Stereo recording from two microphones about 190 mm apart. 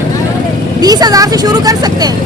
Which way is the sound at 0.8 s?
20° right (ahead or behind).